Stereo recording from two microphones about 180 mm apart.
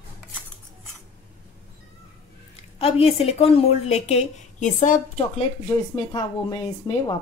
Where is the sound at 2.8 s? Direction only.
35° left (ahead or behind).